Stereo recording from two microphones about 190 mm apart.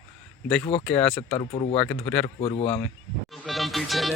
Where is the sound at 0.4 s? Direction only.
5° left (ahead or behind).